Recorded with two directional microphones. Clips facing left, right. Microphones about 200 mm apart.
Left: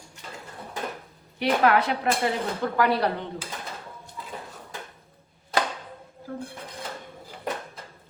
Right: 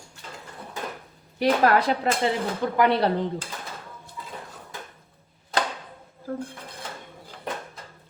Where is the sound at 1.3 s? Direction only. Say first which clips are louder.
Right 1 dB; 40° right (ahead or behind).